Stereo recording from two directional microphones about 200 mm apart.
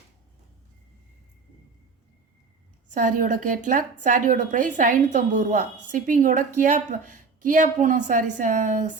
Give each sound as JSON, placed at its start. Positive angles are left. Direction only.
{"t": 2.9, "sound": "a woman's voice", "side_deg": -40}